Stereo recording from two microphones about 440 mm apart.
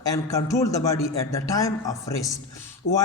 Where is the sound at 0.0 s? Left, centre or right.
Centre.